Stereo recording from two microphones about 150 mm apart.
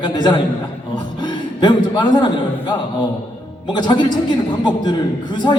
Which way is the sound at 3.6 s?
30° left (ahead or behind).